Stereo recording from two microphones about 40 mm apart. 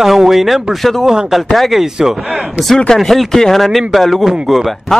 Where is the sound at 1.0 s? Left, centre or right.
Centre.